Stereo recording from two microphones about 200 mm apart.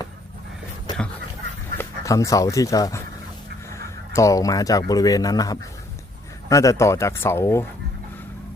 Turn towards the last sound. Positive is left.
turn(degrees=15)  # may be behind; listen again after turning